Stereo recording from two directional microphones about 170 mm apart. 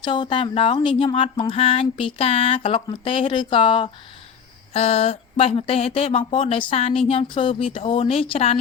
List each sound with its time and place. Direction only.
0.0 s speech: 30° left (ahead or behind)